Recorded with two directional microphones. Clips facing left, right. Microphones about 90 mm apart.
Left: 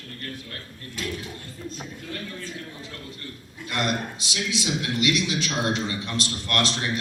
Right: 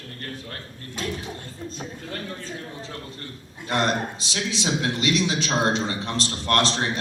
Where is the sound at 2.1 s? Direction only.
35° right (ahead or behind).